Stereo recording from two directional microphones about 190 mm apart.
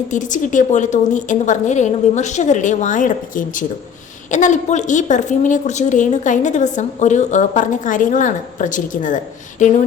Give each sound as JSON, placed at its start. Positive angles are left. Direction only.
{"t": 0.1, "sound": "a woman's voice", "side_deg": 40}